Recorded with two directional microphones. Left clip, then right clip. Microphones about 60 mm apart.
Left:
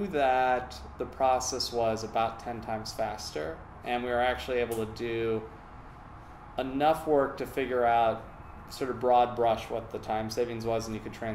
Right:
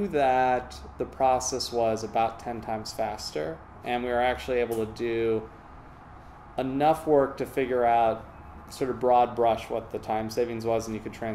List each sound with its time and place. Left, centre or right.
0.0 s speech: right
6.5 s speech: right